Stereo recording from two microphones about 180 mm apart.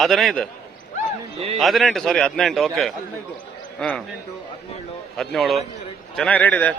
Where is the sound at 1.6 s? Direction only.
Centre (ahead or behind).